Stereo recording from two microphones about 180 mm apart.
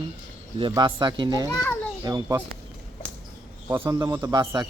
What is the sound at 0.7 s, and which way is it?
Speech, 25° right (ahead or behind).